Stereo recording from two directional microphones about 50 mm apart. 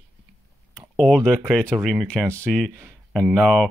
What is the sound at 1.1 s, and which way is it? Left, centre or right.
Speech, centre.